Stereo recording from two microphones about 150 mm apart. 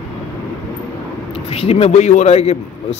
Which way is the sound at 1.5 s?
40° left (ahead or behind).